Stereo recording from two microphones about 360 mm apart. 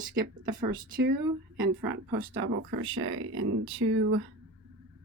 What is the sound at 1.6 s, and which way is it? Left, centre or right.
Speech, right.